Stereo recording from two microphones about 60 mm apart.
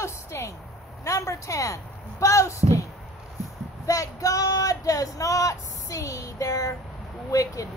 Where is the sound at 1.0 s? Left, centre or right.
Left.